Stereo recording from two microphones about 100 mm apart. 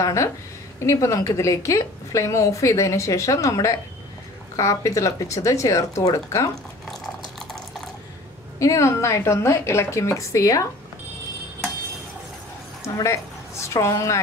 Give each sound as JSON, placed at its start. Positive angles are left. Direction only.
{"t": 0.0, "sound": "a woman's voice", "side_deg": 30}
{"t": 8.5, "sound": "a woman's voice", "side_deg": 30}
{"t": 12.9, "sound": "a woman's voice", "side_deg": 30}